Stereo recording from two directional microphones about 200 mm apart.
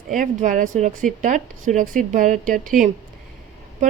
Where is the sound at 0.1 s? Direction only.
40° right (ahead or behind).